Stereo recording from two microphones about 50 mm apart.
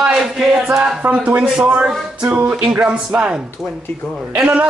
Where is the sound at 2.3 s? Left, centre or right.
Right.